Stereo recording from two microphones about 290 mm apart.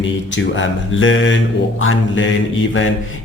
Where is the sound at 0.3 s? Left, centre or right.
Left.